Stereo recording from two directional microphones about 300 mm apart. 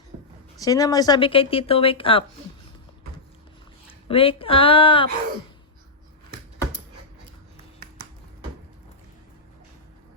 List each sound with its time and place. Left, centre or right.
0.6 s speech: centre
4.1 s speech: centre